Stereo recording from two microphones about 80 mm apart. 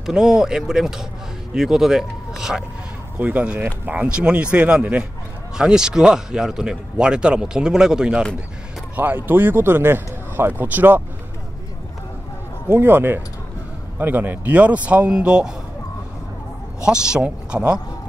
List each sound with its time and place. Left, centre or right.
0.0 s a man's voice: centre
3.2 s a man's voice: right
8.9 s speech: right
12.6 s a man's voice: right; by 15.5 s centre
16.8 s a man's voice: centre